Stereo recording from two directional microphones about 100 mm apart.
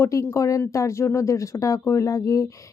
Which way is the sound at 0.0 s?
30° left (ahead or behind).